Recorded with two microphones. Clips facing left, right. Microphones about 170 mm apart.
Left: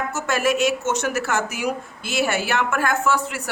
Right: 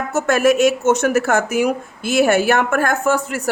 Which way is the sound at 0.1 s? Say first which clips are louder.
Right 9 dB; 50° right (ahead or behind).